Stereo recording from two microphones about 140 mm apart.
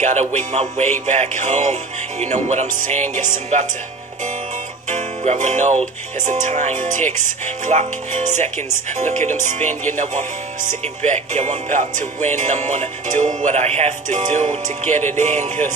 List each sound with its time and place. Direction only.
0.0 s music: 55° right (ahead or behind)
4.8 s music: 60° right (ahead or behind)
9.0 s music: 60° right (ahead or behind)
11.3 s music: 55° right (ahead or behind)